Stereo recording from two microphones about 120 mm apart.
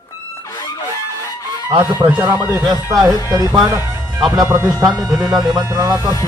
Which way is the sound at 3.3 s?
30° right (ahead or behind).